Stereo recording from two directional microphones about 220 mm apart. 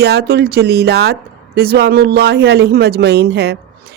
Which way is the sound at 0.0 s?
45° right (ahead or behind).